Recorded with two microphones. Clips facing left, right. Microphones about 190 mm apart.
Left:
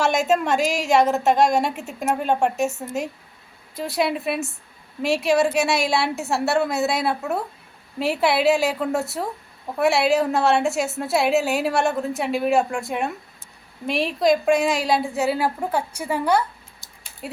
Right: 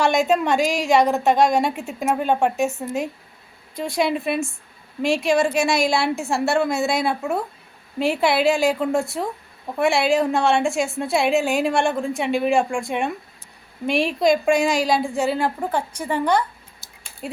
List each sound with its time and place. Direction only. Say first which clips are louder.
0.0 s a woman's voice: right 1 dB; centre (ahead or behind)
3.8 s a woman's voice: right 1 dB; 5° left (ahead or behind)
16.8 s a sound: right 1 dB; 15° left (ahead or behind)
17.2 s a woman's voice: right 2 dB; 5° left (ahead or behind)